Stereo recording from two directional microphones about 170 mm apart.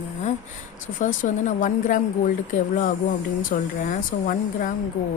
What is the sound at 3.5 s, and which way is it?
Speech, 50° left (ahead or behind).